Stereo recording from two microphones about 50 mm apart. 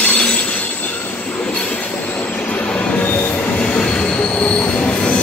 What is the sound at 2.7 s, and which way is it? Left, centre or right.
Train, left.